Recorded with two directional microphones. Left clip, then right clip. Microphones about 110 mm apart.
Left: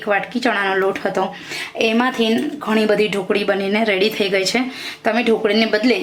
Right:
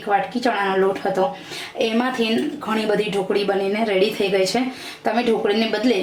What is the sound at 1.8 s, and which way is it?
Speech, 30° left (ahead or behind).